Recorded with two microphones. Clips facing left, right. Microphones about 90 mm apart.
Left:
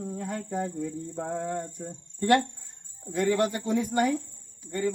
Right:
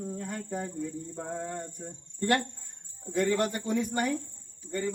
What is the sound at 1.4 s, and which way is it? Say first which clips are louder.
Speech: left 5 dB; 5° left (ahead or behind).